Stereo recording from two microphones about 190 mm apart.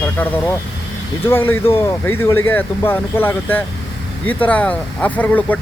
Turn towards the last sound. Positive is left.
turn(degrees=10)  # may be behind; listen again after turning